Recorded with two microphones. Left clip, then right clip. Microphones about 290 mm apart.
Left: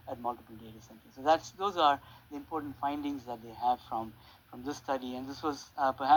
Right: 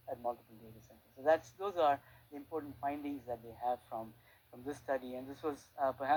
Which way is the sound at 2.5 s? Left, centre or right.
Left.